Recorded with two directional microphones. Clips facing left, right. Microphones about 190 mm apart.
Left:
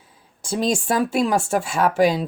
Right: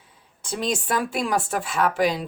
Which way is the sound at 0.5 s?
30° left (ahead or behind).